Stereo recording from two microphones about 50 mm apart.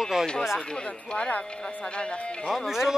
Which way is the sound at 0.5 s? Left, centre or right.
Centre.